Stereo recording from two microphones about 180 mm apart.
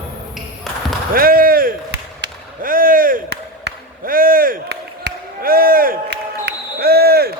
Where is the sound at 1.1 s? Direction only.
55° right (ahead or behind).